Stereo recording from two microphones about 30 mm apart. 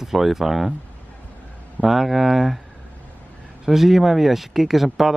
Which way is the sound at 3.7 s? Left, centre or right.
Centre.